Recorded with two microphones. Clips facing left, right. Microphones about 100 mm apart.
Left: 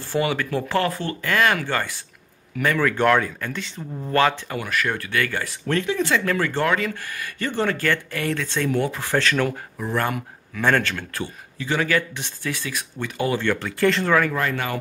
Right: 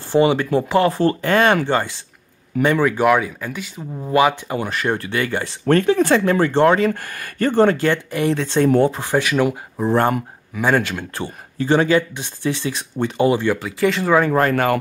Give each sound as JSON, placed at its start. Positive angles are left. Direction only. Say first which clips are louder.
{"t": 0.1, "sound": "speech", "louder": "right 7 dB", "side_deg": -25}
{"t": 0.9, "sound": "speech", "louder": "right 7 dB", "side_deg": -30}
{"t": 4.6, "sound": "speech", "louder": "right 4 dB", "side_deg": -30}
{"t": 5.7, "sound": "speech", "louder": "right 8 dB", "side_deg": -50}
{"t": 6.2, "sound": "speech", "louder": "right 7 dB", "side_deg": -25}
{"t": 7.8, "sound": "speech", "louder": "right 5 dB", "side_deg": -20}
{"t": 8.5, "sound": "speech", "louder": "right 10 dB", "side_deg": -35}
{"t": 8.9, "sound": "speech", "louder": "right 3 dB", "side_deg": -15}
{"t": 9.8, "sound": "speech", "louder": "right 8 dB", "side_deg": -30}
{"t": 10.5, "sound": "speech", "louder": "right 3 dB", "side_deg": -15}
{"t": 11.1, "sound": "speech", "louder": "right 5 dB", "side_deg": -35}
{"t": 11.9, "sound": "speech", "louder": "right 6 dB", "side_deg": -25}
{"t": 13.3, "sound": "speech", "louder": "right 4 dB", "side_deg": -10}
{"t": 14.3, "sound": "speech", "louder": "right 8 dB", "side_deg": -45}